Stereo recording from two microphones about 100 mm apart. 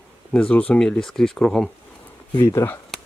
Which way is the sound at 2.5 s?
25° left (ahead or behind).